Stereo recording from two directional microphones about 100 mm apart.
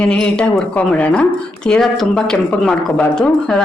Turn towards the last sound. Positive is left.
turn(degrees=5)  # may be behind; listen again after turning